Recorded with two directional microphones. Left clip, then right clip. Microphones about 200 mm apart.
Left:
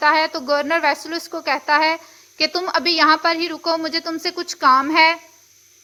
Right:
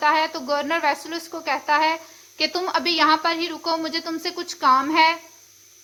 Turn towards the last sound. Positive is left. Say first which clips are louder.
# left 3 dB
turn(degrees=25)  # may be behind; listen again after turning